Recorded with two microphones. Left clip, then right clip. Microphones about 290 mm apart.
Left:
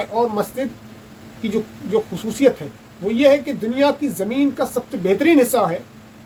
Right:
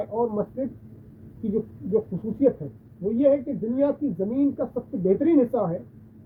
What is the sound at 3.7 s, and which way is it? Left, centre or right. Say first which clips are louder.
Speech: left 7 dB; centre.